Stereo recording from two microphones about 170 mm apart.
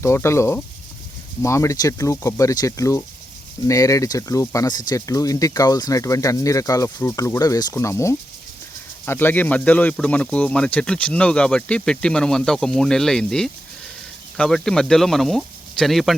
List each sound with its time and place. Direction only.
0.0 s speech: 15° left (ahead or behind); by 16.1 s centre (ahead or behind)